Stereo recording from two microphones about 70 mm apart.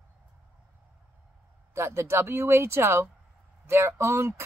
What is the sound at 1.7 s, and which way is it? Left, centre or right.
Speech, right.